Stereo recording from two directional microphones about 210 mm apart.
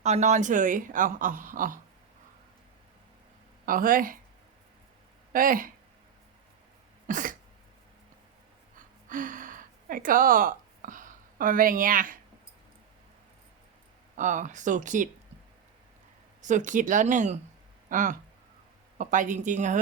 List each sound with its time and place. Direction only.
0.0 s speech: 35° right (ahead or behind)
3.7 s speech: 40° right (ahead or behind)
5.3 s speech: 40° right (ahead or behind)
7.1 s speech: 40° right (ahead or behind)
9.0 s a sound: 40° right (ahead or behind)
14.2 s speech: 35° right (ahead or behind)
16.4 s speech: 35° right (ahead or behind)